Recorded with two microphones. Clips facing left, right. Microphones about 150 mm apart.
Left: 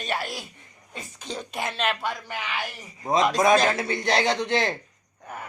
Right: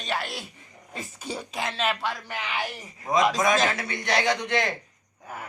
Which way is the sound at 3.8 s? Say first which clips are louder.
Left 3 dB; 30° left (ahead or behind).